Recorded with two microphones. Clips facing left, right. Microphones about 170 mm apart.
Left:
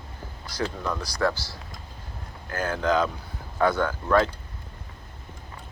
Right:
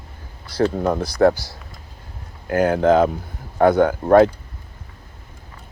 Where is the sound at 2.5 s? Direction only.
60° right (ahead or behind).